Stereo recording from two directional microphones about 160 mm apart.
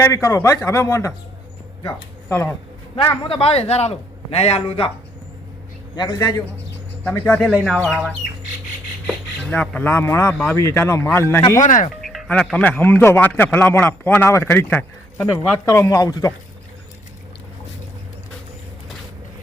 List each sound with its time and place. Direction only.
0.0 s a man's voice: 20° left (ahead or behind)
2.9 s a man's voice: 30° left (ahead or behind)
6.0 s a man's voice: 25° left (ahead or behind); by 8.1 s centre (ahead or behind)
9.4 s a man's voice: 10° left (ahead or behind)
11.6 s speech: 50° left (ahead or behind)
12.0 s a man's voice: 5° left (ahead or behind); by 16.3 s 20° left (ahead or behind)